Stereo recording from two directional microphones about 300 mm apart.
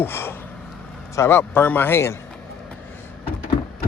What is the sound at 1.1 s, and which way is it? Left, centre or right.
Speech, centre.